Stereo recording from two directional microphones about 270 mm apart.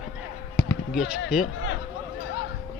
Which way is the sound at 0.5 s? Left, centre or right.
Centre.